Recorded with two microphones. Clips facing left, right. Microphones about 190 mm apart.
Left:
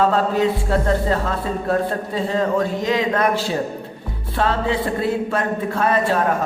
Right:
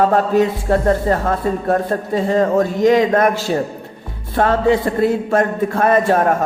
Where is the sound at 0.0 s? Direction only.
50° right (ahead or behind).